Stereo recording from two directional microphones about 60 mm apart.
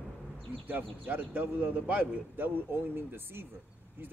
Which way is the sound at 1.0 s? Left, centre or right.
Right.